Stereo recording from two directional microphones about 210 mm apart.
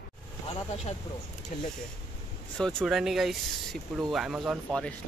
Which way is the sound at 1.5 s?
40° left (ahead or behind).